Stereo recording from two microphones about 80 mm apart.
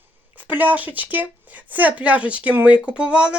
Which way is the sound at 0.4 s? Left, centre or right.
Centre.